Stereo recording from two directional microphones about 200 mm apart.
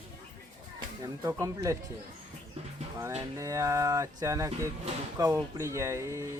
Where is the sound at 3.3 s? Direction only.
15° right (ahead or behind).